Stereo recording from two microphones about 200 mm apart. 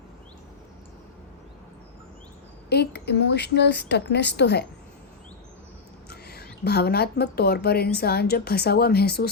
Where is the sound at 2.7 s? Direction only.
55° left (ahead or behind).